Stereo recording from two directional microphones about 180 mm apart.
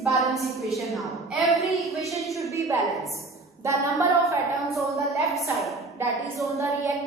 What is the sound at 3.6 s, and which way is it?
Speech, 15° right (ahead or behind).